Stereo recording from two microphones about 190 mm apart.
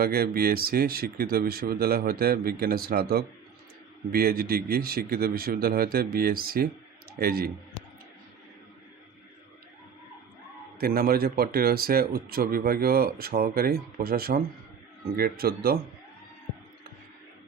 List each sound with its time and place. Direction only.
0.0 s speech: 55° right (ahead or behind)
10.8 s speech: 50° right (ahead or behind)